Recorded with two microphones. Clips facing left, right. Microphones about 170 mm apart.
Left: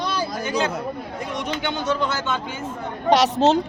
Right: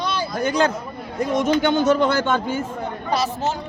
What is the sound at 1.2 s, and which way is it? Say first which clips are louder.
A man's voice: right 11 dB; 40° right (ahead or behind).